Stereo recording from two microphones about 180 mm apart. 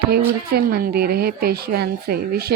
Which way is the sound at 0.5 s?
60° right (ahead or behind).